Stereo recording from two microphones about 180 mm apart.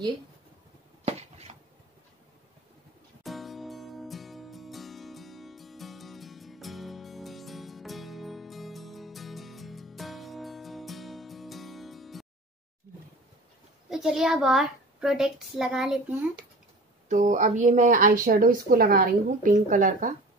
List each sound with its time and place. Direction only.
1.0 s a sound: 35° right (ahead or behind)
3.3 s music: centre (ahead or behind)
13.8 s a woman's voice: centre (ahead or behind)
17.1 s a woman's voice: 45° right (ahead or behind)